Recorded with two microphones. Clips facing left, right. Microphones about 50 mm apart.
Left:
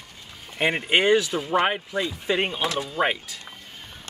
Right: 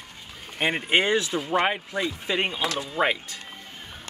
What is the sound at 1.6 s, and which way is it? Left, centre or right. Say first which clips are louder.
Speech: left 1 dB; centre.